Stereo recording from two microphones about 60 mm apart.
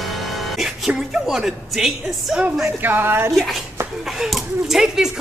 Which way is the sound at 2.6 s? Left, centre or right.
Right.